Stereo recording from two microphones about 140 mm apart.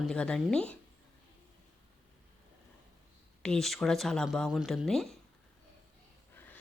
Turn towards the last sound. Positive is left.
turn(degrees=15)  # may be behind; listen again after turning